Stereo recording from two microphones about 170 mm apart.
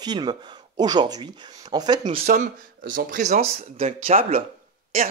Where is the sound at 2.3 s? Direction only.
50° right (ahead or behind).